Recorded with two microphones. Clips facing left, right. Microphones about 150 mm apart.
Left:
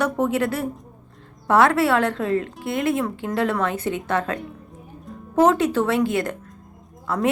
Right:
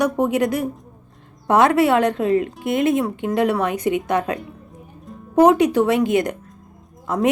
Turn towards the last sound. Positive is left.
turn(degrees=-20)  # may be behind; listen again after turning